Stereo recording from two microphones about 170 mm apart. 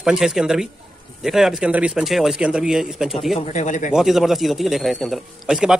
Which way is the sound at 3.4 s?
45° left (ahead or behind).